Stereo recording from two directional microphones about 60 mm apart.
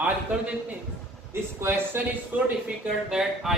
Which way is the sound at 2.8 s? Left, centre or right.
Centre.